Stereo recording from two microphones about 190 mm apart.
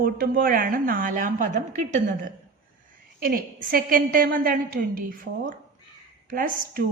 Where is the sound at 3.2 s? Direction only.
50° right (ahead or behind).